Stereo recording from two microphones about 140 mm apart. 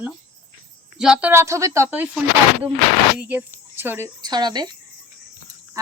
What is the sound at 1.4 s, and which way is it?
Speech, 20° right (ahead or behind).